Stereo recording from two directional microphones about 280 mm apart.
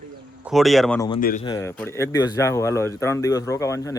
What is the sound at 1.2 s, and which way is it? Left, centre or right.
Speech, left.